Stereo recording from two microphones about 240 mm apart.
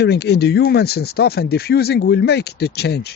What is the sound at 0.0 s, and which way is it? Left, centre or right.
Speech, left.